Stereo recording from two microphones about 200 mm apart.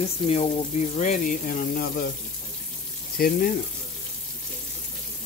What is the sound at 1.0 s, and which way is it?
Speech, 40° left (ahead or behind).